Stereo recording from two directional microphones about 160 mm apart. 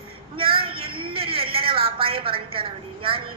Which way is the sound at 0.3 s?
35° right (ahead or behind).